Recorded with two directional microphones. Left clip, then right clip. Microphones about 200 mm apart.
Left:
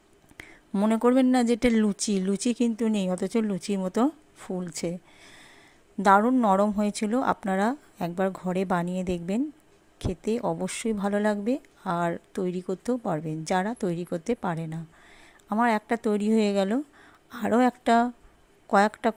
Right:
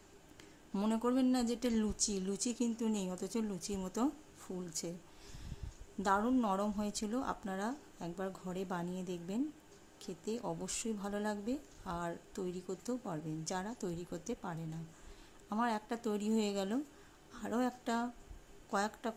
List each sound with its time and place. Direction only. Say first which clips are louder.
0.3 s speech: left 12 dB; 30° left (ahead or behind)